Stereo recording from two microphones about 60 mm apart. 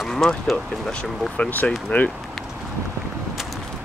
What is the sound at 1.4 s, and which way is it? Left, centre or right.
Speech, left.